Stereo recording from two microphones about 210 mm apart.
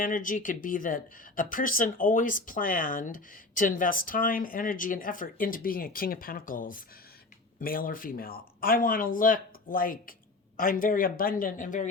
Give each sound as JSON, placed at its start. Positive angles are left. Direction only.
{"t": 0.0, "sound": "speech", "side_deg": 40}